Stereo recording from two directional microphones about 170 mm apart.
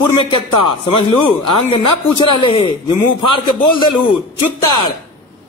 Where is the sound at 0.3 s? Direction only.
30° left (ahead or behind).